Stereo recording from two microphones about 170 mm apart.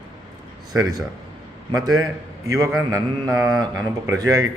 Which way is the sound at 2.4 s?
20° right (ahead or behind).